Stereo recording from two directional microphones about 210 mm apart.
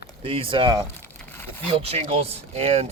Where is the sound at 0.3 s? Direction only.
25° right (ahead or behind).